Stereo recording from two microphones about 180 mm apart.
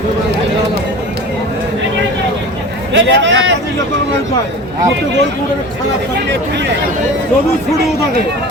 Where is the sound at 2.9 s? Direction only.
90° right.